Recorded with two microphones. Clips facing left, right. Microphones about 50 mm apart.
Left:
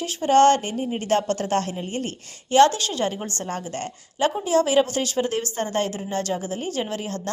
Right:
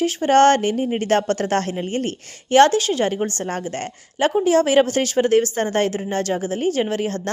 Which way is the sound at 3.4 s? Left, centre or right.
Right.